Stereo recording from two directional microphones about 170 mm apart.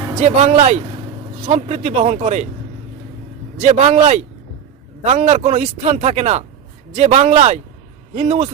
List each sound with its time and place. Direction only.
0.2 s speech: 45° right (ahead or behind)
3.6 s speech: 40° right (ahead or behind)